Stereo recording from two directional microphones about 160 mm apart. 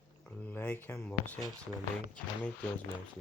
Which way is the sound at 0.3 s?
10° left (ahead or behind).